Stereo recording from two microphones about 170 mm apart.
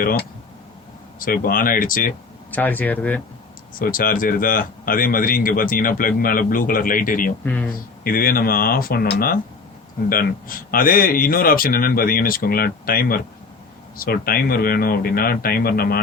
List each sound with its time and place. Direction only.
0.0 s speech: 60° left (ahead or behind)
2.5 s speech: 10° left (ahead or behind)
3.8 s speech: 55° left (ahead or behind)
7.4 s speech: 10° left (ahead or behind)
8.0 s speech: 60° left (ahead or behind)